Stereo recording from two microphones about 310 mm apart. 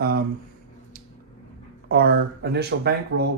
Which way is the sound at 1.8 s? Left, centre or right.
Right.